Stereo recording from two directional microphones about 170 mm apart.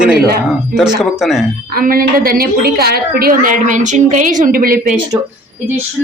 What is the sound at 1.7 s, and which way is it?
A woman's voice, 60° right (ahead or behind).